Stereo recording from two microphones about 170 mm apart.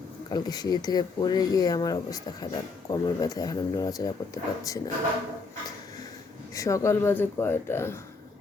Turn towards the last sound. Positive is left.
turn(degrees=15)  # may be behind; listen again after turning